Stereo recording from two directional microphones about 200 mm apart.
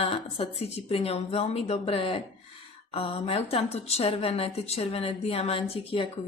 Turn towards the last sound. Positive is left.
turn(degrees=25)  # may be behind; listen again after turning